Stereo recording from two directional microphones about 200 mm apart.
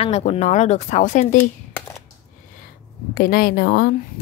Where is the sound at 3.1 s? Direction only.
50° left (ahead or behind).